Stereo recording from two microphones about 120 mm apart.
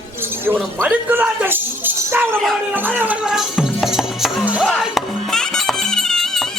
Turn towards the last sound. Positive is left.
turn(degrees=0)  # may be behind; listen again after turning